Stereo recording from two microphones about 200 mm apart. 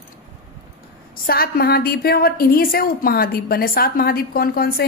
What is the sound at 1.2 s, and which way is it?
A woman's voice, 50° left (ahead or behind).